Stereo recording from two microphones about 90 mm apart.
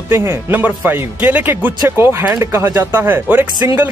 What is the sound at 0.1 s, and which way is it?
Speech, 30° right (ahead or behind).